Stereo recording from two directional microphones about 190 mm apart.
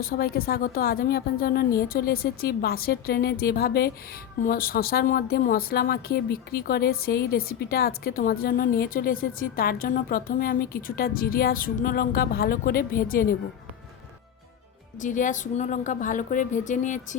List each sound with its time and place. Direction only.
0.0 s speech: 50° left (ahead or behind)
15.0 s a woman's voice: 40° left (ahead or behind)